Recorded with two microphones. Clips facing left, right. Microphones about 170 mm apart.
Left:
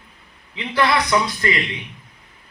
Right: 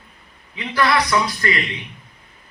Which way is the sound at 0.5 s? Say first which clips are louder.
Even; 25° left (ahead or behind).